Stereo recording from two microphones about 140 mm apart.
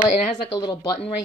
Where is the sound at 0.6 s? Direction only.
25° left (ahead or behind).